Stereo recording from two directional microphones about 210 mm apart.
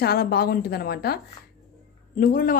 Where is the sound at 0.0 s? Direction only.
50° left (ahead or behind).